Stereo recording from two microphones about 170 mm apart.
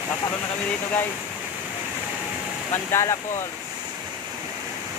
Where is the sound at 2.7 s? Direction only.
15° left (ahead or behind).